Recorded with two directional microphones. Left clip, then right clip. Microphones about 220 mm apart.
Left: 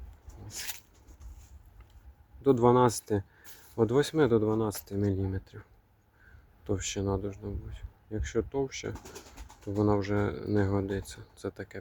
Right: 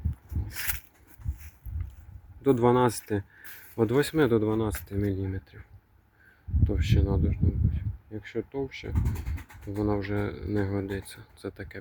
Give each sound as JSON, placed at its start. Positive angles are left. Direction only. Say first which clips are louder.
{"t": 0.4, "sound": "a sound", "louder": "right 5 dB", "side_deg": 0}
{"t": 2.4, "sound": "speech", "louder": "even", "side_deg": 0}
{"t": 6.7, "sound": "speech", "louder": "even", "side_deg": 10}